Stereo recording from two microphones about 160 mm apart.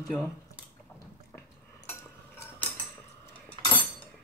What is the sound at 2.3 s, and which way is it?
Mechanisms, 15° left (ahead or behind).